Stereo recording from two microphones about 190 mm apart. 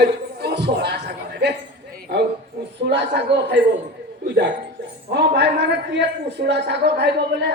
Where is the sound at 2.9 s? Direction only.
65° right (ahead or behind).